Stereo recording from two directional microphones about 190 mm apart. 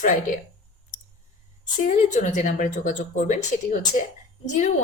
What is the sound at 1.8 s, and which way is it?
Speech, 40° left (ahead or behind).